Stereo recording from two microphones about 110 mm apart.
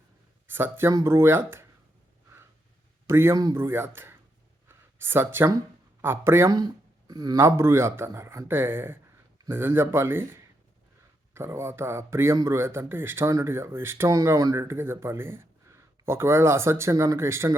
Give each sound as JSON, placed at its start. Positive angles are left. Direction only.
{"t": 0.5, "sound": "speech", "side_deg": -20}
{"t": 3.1, "sound": "speech", "side_deg": -25}
{"t": 4.7, "sound": "a sound", "side_deg": -20}
{"t": 6.0, "sound": "speech", "side_deg": -20}
{"t": 7.1, "sound": "speech", "side_deg": -40}
{"t": 7.3, "sound": "speech", "side_deg": -25}
{"t": 14.1, "sound": "speech", "side_deg": -30}